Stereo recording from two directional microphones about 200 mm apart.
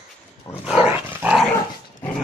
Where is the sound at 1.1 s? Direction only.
10° right (ahead or behind).